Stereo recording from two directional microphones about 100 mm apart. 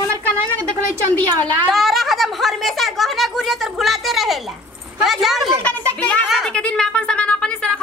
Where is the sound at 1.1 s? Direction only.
20° left (ahead or behind).